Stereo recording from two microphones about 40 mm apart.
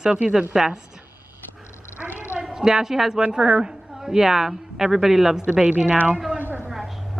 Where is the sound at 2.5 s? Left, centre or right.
Centre.